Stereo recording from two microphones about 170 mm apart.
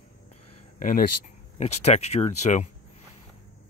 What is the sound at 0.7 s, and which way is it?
Speech, 55° left (ahead or behind).